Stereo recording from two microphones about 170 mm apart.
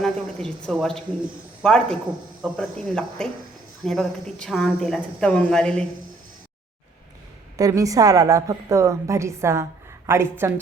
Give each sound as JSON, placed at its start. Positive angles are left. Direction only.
{"t": 0.0, "sound": "speech", "side_deg": 5}
{"t": 7.5, "sound": "a woman's voice", "side_deg": -20}